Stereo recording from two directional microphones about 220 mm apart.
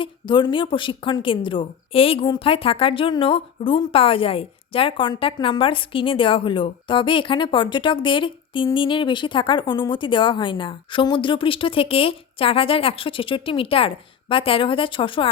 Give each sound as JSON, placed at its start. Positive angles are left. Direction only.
{"t": 0.0, "sound": "a woman's voice", "side_deg": 20}